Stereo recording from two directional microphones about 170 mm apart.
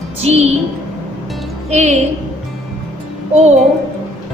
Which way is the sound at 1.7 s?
40° right (ahead or behind).